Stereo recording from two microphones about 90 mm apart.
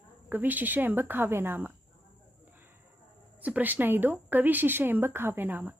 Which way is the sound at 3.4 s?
20° right (ahead or behind).